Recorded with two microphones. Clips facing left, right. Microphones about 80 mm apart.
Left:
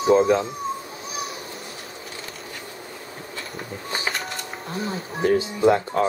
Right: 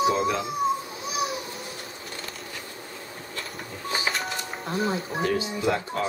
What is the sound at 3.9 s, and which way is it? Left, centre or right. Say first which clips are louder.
Music: right 1 dB; centre.